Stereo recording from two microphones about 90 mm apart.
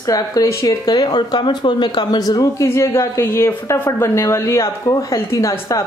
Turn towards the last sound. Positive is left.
turn(degrees=35)  # may be behind; listen again after turning